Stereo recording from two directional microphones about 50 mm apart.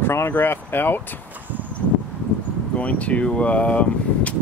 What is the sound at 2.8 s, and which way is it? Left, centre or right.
Speech, left.